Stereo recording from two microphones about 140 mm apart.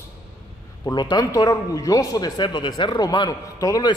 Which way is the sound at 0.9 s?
30° left (ahead or behind).